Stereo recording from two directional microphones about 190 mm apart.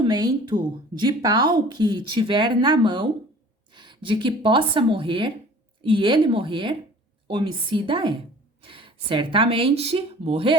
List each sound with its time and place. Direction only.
0.0 s a woman's voice: 20° right (ahead or behind)